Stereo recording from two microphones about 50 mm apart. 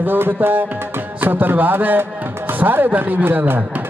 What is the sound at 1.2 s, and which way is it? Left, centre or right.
Speech, right.